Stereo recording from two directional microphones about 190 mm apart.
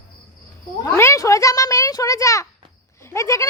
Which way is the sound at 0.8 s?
15° left (ahead or behind).